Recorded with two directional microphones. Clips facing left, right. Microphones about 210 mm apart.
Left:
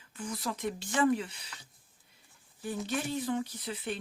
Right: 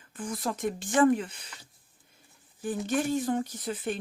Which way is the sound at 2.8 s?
50° right (ahead or behind).